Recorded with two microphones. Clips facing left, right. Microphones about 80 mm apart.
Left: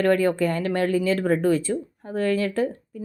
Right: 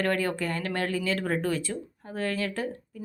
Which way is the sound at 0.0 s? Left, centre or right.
Left.